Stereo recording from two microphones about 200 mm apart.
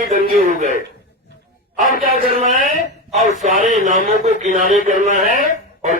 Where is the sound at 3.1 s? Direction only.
35° right (ahead or behind).